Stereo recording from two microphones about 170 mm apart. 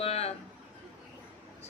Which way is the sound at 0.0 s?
40° left (ahead or behind).